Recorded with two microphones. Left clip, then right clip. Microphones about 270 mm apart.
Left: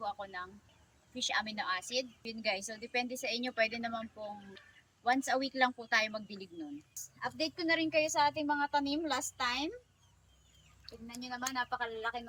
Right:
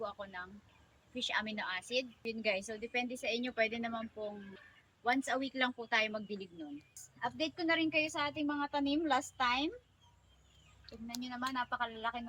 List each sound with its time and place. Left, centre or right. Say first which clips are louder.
0.2 s a woman's voice: left 2 dB; centre
5.0 s a woman's voice: left 2 dB; centre
8.5 s a woman's voice: left 4 dB; left
8.9 s a woman's voice: right 2 dB; centre
11.0 s a woman's voice: even; centre